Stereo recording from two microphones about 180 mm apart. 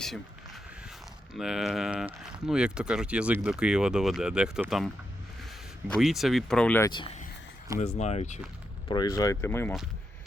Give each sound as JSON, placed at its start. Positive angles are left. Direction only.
{"t": 0.0, "sound": "a sound", "side_deg": 0}
{"t": 1.3, "sound": "speech", "side_deg": 0}
{"t": 5.9, "sound": "speech", "side_deg": 0}
{"t": 6.9, "sound": "speech", "side_deg": 30}
{"t": 7.9, "sound": "speech", "side_deg": 40}
{"t": 8.9, "sound": "speech", "side_deg": 20}